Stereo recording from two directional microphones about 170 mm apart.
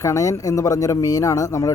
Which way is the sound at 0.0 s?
20° left (ahead or behind).